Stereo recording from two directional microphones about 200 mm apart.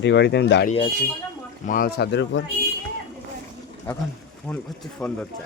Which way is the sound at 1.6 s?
45° left (ahead or behind).